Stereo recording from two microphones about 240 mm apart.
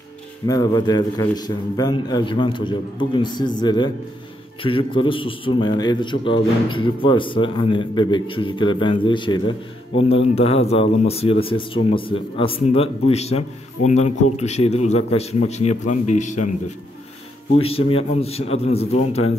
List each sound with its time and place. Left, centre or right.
0.5 s a man's voice: centre
17.6 s a man's voice: left